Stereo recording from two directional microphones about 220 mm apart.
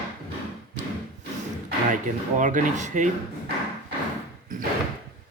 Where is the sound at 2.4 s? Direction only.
35° right (ahead or behind).